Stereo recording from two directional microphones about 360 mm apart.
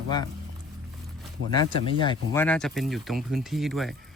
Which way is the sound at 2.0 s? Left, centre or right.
Centre.